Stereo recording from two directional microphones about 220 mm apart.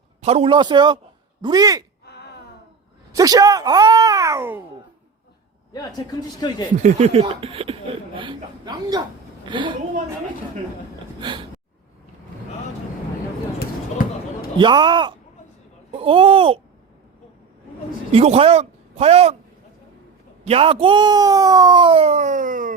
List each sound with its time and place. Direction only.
0.2 s speech: 30° right (ahead or behind)
2.1 s a sound: 45° left (ahead or behind)
3.1 s speech: 15° right (ahead or behind)
5.7 s speech: 20° left (ahead or behind)
6.8 s speech: 30° right (ahead or behind)
11.2 s speech: 20° right (ahead or behind)
14.6 s speech: 20° right (ahead or behind)
18.1 s speech: 30° right (ahead or behind)
20.4 s speech: 25° right (ahead or behind)